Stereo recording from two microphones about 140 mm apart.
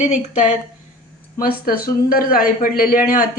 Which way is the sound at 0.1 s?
55° left (ahead or behind).